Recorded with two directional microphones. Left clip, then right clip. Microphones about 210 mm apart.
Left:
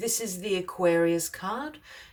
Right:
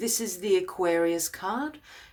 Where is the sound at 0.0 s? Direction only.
25° right (ahead or behind).